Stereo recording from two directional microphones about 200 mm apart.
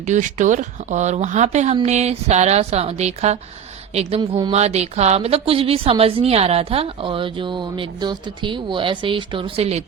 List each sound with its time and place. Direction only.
0.0 s a woman's voice: 35° right (ahead or behind); by 4.5 s 20° right (ahead or behind)
4.5 s a woman's voice: 35° right (ahead or behind)